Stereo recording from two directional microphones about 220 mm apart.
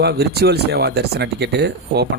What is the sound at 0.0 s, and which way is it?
Speech, 45° right (ahead or behind).